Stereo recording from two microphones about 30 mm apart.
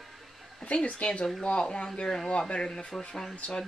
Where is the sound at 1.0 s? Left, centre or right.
Left.